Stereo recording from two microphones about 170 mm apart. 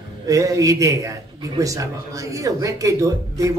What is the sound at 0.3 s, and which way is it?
A man's voice, 20° right (ahead or behind).